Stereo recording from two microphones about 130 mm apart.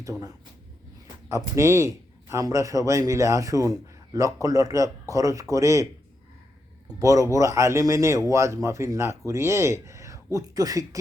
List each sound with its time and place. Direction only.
0.0 s a man's voice: 25° right (ahead or behind)
7.0 s a man's voice: 25° right (ahead or behind)